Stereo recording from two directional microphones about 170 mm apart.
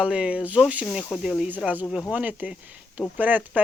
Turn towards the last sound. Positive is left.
turn(degrees=-10)  # may be behind; listen again after turning